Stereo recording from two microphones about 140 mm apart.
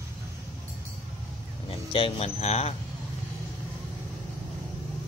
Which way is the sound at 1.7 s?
40° left (ahead or behind).